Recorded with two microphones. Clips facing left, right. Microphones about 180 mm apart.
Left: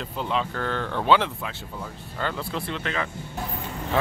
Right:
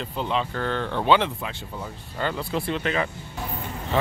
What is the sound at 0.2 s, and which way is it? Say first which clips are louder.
Speech: right 1 dB; centre (ahead or behind).